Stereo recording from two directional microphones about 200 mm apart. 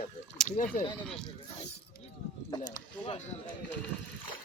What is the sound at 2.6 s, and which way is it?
Speech, 20° left (ahead or behind).